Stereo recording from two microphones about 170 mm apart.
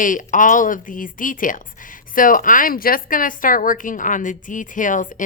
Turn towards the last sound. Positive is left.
turn(degrees=50)  # may be behind; listen again after turning